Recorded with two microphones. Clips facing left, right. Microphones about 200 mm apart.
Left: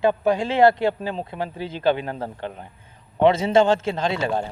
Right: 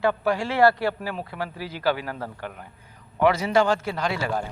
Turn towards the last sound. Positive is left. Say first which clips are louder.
# left 3 dB
turn(degrees=25)  # may be behind; listen again after turning